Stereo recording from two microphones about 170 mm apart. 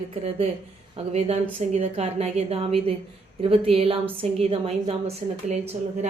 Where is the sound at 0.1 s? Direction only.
35° right (ahead or behind).